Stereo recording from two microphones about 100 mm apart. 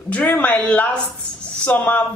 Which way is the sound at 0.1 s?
15° left (ahead or behind).